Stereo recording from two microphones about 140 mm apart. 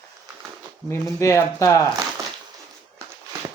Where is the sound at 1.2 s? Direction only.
20° left (ahead or behind).